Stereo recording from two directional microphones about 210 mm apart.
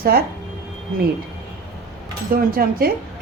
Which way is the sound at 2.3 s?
45° right (ahead or behind).